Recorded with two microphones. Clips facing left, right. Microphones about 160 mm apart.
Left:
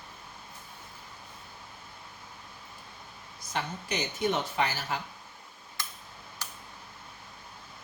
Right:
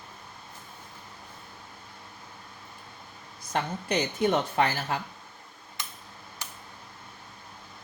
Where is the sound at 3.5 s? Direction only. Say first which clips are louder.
Right 5 dB; 55° right (ahead or behind).